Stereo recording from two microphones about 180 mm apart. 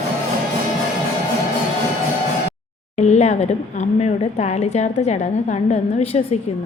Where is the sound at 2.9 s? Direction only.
40° left (ahead or behind).